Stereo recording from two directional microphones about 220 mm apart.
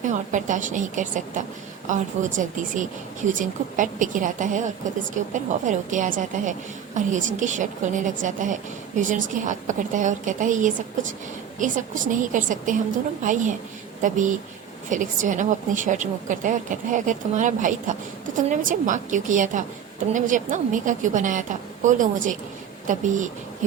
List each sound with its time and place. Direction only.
0.0 s a woman's voice: 35° right (ahead or behind)